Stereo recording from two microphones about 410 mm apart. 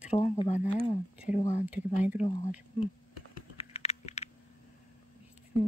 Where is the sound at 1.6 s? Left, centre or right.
Centre.